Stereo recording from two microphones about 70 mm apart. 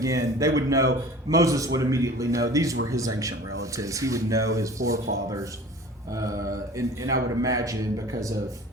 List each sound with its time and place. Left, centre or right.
0.0 s speech: right